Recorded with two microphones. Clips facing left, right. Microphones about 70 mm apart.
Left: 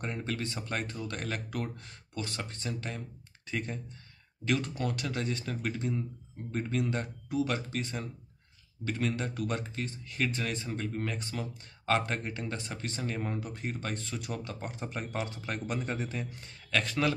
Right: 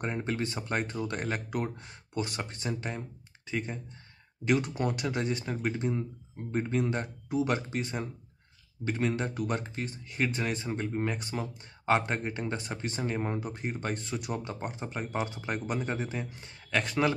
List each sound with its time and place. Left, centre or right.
0.0 s speech: centre
3.4 s speech: centre
9.3 s speech: centre
9.8 s speech: centre